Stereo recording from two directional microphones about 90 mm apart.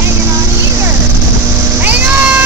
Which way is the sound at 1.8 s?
20° right (ahead or behind).